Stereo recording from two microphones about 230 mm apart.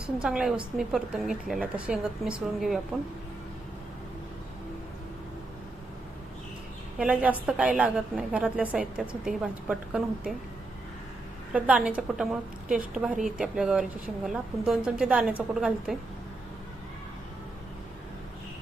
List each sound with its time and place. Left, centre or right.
0.2 s a woman's voice: centre
7.0 s a woman's voice: centre
11.5 s a woman's voice: centre